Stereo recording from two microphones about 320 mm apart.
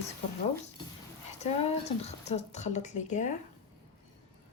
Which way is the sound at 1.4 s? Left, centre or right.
Centre.